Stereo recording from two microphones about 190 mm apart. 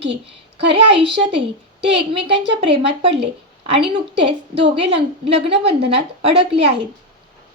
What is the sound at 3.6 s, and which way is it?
A woman's voice, 30° right (ahead or behind).